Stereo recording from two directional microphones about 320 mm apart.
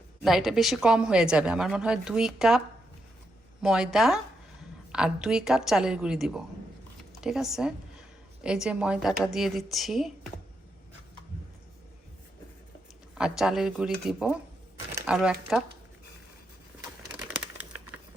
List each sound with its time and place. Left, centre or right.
0.3 s a woman's voice: centre
3.6 s a woman's voice: centre
13.1 s a woman's voice: centre